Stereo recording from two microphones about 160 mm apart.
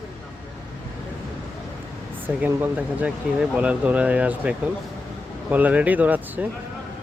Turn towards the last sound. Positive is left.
turn(degrees=-10)  # may be behind; listen again after turning